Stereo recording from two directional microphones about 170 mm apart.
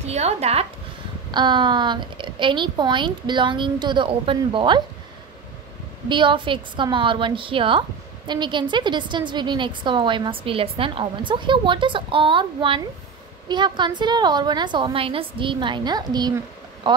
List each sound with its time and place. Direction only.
0.0 s speech: 40° right (ahead or behind)
1.3 s a woman's voice: 25° right (ahead or behind)
6.0 s a woman's voice: 30° right (ahead or behind)